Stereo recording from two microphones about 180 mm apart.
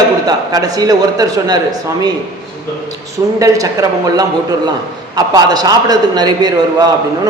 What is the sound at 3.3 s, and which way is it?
A woman's voice, 20° right (ahead or behind).